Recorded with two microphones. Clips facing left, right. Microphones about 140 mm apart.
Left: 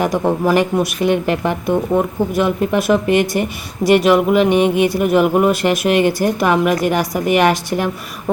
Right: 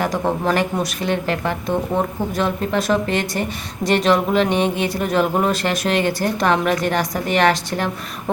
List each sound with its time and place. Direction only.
0.0 s speech: 15° left (ahead or behind)